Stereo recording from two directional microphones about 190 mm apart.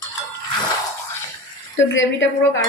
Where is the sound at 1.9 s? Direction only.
85° left.